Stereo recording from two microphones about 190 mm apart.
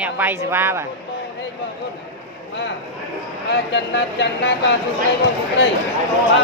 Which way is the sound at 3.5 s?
65° left (ahead or behind).